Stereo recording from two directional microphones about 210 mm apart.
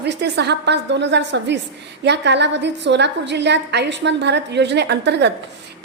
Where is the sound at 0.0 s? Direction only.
50° right (ahead or behind).